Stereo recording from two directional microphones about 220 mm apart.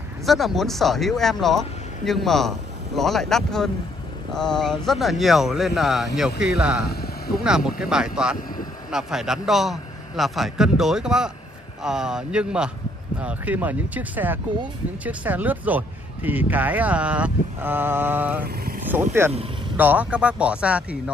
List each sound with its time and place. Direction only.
0.2 s a man's voice: centre (ahead or behind)
6.9 s vehicle: 45° left (ahead or behind)
7.3 s a man's voice: 5° right (ahead or behind)